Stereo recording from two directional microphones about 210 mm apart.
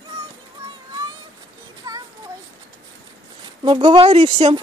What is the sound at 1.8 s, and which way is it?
Child singing, 15° right (ahead or behind).